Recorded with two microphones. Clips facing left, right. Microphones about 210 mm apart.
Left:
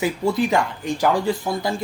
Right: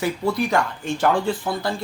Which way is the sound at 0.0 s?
20° left (ahead or behind).